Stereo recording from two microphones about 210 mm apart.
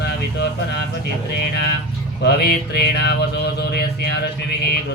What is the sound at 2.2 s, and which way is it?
Music, 50° left (ahead or behind).